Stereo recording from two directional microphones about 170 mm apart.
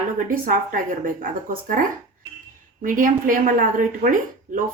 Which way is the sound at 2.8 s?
50° right (ahead or behind).